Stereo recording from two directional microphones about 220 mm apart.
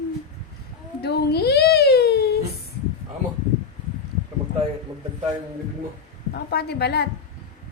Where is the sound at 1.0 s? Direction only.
45° left (ahead or behind).